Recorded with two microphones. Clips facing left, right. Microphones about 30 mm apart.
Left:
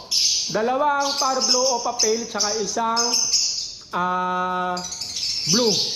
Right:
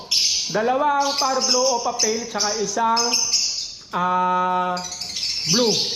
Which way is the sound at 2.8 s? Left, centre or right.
Right.